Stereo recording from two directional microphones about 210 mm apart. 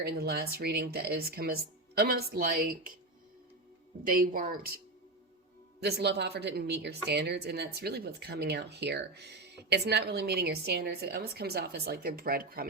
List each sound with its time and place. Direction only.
0.0 s a woman's voice: 50° right (ahead or behind)
4.0 s a woman's voice: 40° right (ahead or behind)
5.8 s a woman's voice: 50° right (ahead or behind)